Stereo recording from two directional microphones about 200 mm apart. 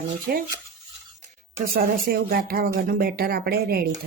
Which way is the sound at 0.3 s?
50° right (ahead or behind).